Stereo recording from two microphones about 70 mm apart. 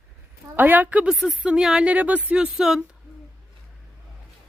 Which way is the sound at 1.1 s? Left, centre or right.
Centre.